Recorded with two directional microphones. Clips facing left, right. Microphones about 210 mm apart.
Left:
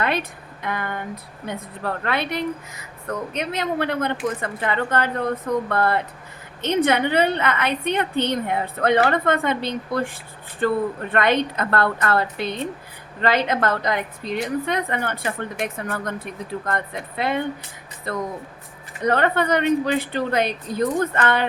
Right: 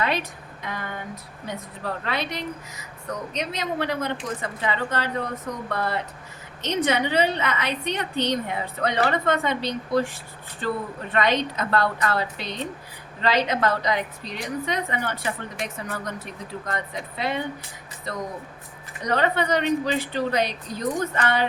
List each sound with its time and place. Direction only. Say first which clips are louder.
0.0 s a woman's voice: left 2 dB; 55° left (ahead or behind)